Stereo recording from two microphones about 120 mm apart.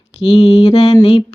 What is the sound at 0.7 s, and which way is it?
Female singing, 35° left (ahead or behind).